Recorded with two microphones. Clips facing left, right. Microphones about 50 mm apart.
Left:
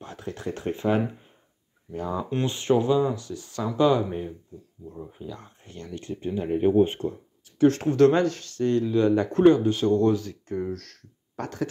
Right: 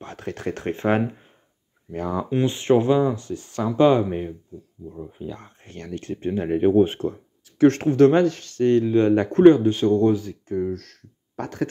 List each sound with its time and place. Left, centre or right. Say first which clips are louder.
0.0 s speech: right 4 dB; right
2.4 s speech: right 4 dB; right
4.8 s speech: right 3 dB; centre
5.2 s speech: right 5 dB; right
5.7 s speech: right 4 dB; right
7.8 s speech: right 3 dB; right
10.0 s speech: right 3 dB; centre
11.3 s speech: right 2 dB; right